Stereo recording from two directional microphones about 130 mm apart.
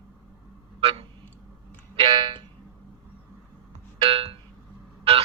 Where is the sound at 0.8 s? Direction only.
50° right (ahead or behind).